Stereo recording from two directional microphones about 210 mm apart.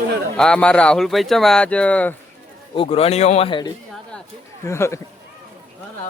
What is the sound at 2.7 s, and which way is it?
Speech, 30° left (ahead or behind).